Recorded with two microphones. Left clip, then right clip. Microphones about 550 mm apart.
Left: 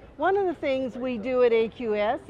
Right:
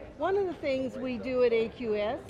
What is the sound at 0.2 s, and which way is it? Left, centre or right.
A woman's voice, left.